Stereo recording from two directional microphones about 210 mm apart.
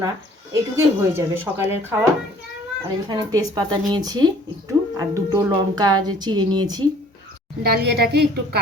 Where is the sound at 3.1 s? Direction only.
15° right (ahead or behind).